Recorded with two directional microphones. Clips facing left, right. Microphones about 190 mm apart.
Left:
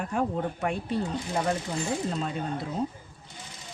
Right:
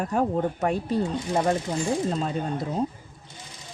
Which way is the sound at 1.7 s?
25° right (ahead or behind).